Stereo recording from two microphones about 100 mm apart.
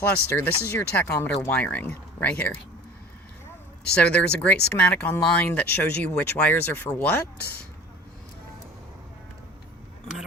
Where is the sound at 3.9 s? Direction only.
15° left (ahead or behind).